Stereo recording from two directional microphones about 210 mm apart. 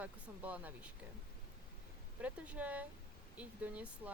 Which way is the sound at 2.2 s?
5° right (ahead or behind).